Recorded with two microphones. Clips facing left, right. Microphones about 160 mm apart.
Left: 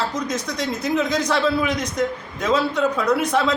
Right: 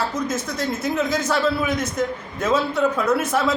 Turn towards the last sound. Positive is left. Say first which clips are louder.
# left 1 dB
turn(degrees=-5)  # may be behind; listen again after turning